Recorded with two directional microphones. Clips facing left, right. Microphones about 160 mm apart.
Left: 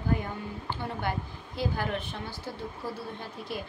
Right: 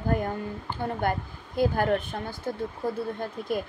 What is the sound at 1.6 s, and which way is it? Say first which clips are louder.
A woman's voice: right 7 dB; 50° right (ahead or behind).